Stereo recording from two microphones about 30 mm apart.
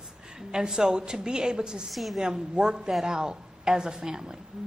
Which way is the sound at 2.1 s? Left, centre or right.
Right.